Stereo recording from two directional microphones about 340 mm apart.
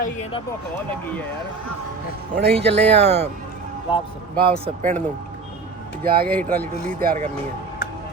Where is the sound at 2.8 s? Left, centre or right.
Centre.